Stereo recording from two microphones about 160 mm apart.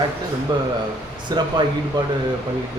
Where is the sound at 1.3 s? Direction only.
25° right (ahead or behind).